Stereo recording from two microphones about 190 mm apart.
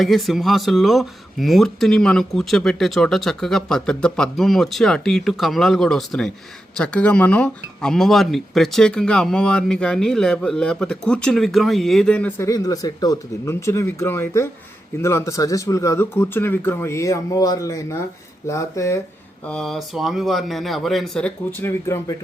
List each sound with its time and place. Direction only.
0.0 s speech: centre (ahead or behind)
12.5 s speech: 20° left (ahead or behind)
19.5 s speech: centre (ahead or behind)